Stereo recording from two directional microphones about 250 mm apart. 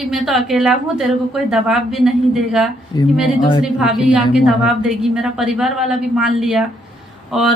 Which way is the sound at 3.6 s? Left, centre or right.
Centre.